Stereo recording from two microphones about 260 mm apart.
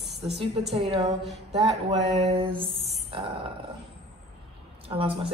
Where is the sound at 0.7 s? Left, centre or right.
Right.